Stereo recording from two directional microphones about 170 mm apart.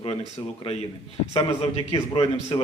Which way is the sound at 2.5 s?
20° left (ahead or behind).